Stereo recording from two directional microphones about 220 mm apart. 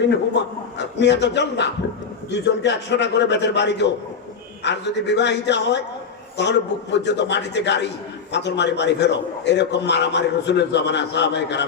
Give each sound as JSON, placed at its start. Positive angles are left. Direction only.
{"t": 0.0, "sound": "a man's voice", "side_deg": 50}